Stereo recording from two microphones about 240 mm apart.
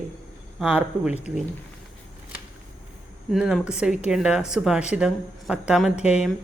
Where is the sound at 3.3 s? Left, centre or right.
Centre.